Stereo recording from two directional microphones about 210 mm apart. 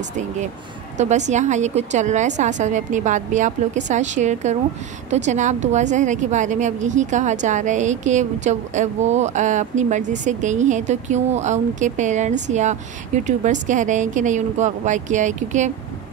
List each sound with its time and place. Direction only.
0.9 s a woman's voice: 35° right (ahead or behind)